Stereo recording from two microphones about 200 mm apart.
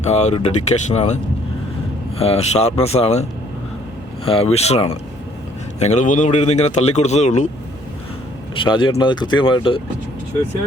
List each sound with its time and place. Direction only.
0.0 s speech: 35° left (ahead or behind)
4.3 s speech: 30° left (ahead or behind)
8.5 s speech: 25° left (ahead or behind)